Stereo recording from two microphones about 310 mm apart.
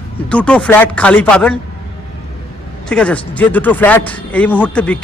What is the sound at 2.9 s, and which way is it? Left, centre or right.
Speech, centre.